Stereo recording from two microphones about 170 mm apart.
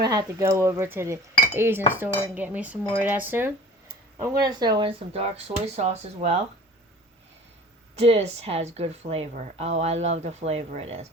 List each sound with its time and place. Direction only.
0.0 s speech: 20° right (ahead or behind); by 6.4 s 40° right (ahead or behind)
7.9 s speech: 35° right (ahead or behind)